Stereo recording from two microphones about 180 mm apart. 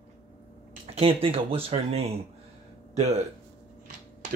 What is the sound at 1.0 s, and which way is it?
Speech, 30° right (ahead or behind).